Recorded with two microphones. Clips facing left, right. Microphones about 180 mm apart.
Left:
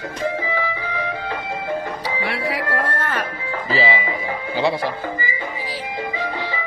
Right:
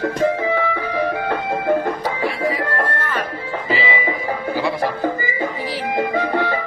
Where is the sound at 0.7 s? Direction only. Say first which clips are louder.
Right 6 dB; 55° right (ahead or behind).